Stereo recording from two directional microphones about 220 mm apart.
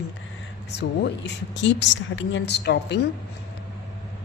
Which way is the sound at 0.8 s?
50° left (ahead or behind).